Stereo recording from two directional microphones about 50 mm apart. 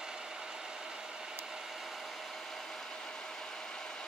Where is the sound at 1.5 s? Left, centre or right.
Centre.